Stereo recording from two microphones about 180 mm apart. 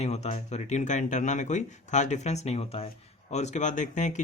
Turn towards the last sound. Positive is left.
turn(degrees=45)  # may be behind; listen again after turning